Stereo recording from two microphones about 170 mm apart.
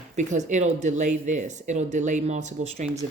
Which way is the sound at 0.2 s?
45° right (ahead or behind).